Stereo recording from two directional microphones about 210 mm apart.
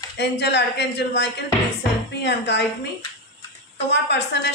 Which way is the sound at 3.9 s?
55° left (ahead or behind).